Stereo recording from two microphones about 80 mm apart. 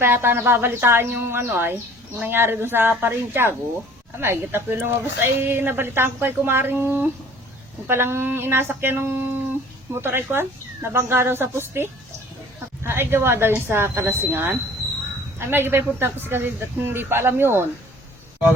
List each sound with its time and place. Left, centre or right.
0.0 s speech: right